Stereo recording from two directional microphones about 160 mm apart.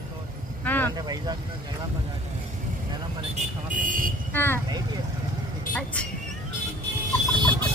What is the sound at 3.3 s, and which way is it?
Speech, 55° right (ahead or behind).